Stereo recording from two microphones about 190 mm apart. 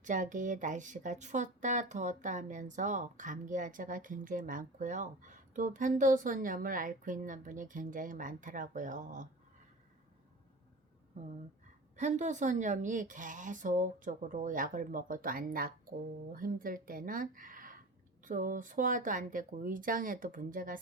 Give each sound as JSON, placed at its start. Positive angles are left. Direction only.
{"t": 0.0, "sound": "speech", "side_deg": -45}
{"t": 11.9, "sound": "speech", "side_deg": -40}